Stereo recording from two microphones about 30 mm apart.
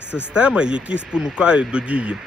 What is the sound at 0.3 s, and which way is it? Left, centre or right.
Speech, right.